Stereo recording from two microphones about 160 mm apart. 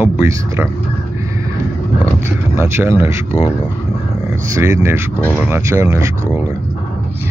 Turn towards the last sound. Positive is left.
turn(degrees=-15)  # may be behind; listen again after turning